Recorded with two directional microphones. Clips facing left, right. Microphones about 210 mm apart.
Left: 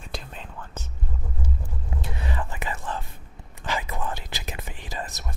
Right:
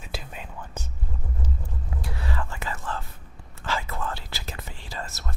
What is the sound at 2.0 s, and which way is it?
Whispering, 20° left (ahead or behind).